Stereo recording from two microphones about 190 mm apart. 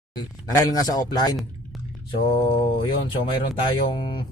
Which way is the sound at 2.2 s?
30° left (ahead or behind).